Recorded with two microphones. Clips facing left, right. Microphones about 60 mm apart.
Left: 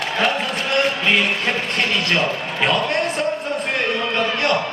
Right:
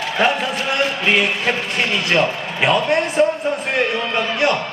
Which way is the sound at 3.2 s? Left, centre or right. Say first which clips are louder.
Right 5 dB; centre.